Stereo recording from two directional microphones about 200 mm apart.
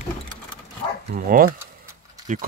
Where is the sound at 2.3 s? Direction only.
40° right (ahead or behind).